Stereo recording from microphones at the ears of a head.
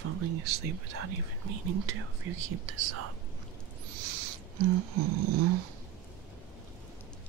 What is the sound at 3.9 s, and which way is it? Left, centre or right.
Wheeze, right.